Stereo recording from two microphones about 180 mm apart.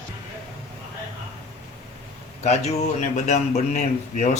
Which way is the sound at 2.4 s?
40° left (ahead or behind).